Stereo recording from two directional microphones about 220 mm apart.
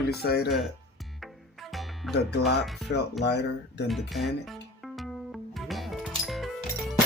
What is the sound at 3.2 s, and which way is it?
Speech, 50° left (ahead or behind).